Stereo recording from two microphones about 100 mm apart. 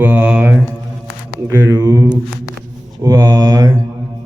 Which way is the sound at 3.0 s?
40° right (ahead or behind).